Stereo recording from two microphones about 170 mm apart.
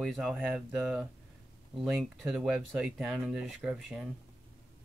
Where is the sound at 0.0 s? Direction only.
Centre (ahead or behind).